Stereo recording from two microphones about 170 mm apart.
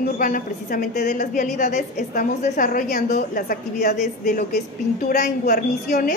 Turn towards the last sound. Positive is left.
turn(degrees=55)  # may be behind; listen again after turning